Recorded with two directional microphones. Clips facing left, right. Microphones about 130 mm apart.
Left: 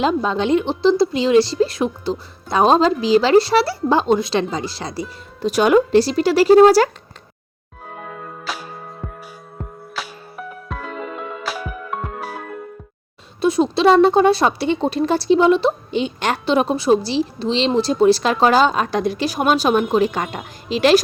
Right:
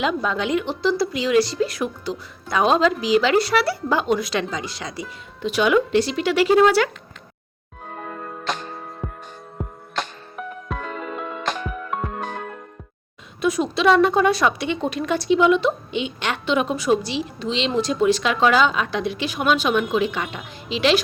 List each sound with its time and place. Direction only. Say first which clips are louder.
0.0 s a woman's voice: left 4 dB; 30° left (ahead or behind)
7.9 s music: even; centre (ahead or behind)
13.4 s a woman's voice: left 4 dB; 30° left (ahead or behind)